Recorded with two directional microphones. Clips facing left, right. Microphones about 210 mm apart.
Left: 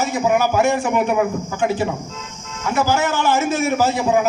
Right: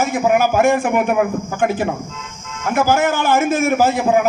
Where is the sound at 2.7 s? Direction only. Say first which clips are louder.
Right 3 dB; 55° right (ahead or behind).